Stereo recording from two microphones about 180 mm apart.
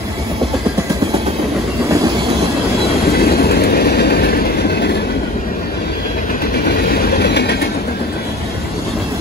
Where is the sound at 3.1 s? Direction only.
60° left (ahead or behind).